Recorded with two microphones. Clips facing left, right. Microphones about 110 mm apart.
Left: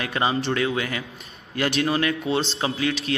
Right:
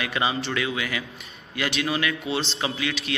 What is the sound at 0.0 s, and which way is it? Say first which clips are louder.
A man's voice: left 2 dB; 40° left (ahead or behind).